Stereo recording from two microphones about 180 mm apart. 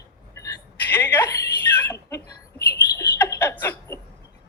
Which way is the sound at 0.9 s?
10° left (ahead or behind).